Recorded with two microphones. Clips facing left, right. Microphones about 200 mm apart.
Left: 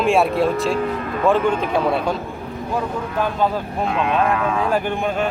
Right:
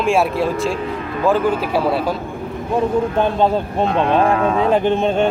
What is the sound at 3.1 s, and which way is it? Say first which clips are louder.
Speech: right 4 dB; 25° right (ahead or behind).